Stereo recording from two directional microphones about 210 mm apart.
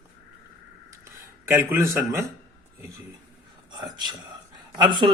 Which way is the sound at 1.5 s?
10° right (ahead or behind).